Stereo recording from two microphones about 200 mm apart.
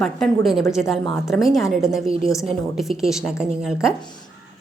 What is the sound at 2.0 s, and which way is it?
Speech, 25° right (ahead or behind).